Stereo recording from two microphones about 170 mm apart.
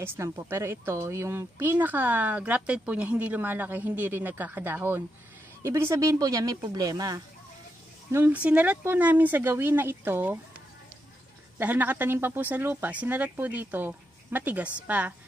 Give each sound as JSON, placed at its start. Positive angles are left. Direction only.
{"t": 0.0, "sound": "speech", "side_deg": -15}
{"t": 8.1, "sound": "speech", "side_deg": -10}
{"t": 11.5, "sound": "speech", "side_deg": -10}